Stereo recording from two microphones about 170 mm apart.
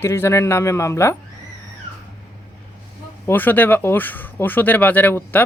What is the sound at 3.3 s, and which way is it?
Speech, 10° left (ahead or behind).